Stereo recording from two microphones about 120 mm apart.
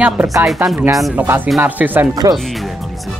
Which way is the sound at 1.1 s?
15° right (ahead or behind).